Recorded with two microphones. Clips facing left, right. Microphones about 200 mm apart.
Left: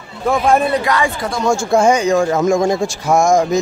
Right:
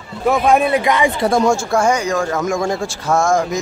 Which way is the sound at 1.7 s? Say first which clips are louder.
Left 4 dB; 20° left (ahead or behind).